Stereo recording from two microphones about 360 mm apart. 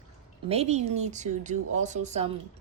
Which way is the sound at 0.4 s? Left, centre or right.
Centre.